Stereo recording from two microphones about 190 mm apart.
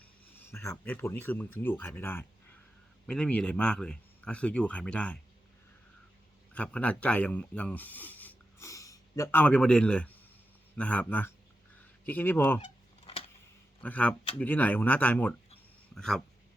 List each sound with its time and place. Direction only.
0.3 s speech: 15° left (ahead or behind)
6.5 s speech: 5° left (ahead or behind)
13.1 s a sound: 30° left (ahead or behind)
13.8 s speech: 5° left (ahead or behind)